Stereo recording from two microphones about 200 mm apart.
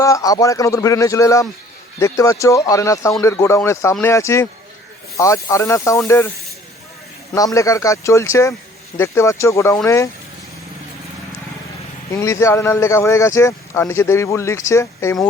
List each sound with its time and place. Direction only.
0.0 s speech: 15° left (ahead or behind)
7.3 s speech: 15° left (ahead or behind)
12.1 s speech: 15° left (ahead or behind)